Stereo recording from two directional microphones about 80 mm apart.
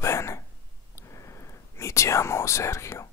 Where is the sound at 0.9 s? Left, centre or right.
Left.